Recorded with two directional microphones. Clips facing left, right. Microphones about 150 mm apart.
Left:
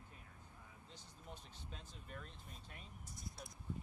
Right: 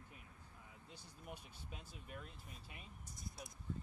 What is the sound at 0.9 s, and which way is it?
Speech, 10° right (ahead or behind).